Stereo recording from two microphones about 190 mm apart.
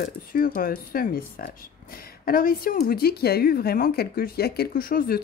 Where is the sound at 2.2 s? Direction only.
50° left (ahead or behind).